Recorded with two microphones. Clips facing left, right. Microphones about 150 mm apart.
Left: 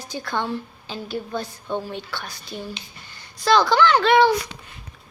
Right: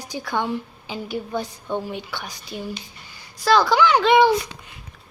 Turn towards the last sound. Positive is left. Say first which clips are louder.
# right 1 dB
turn(degrees=-15)  # may be behind; listen again after turning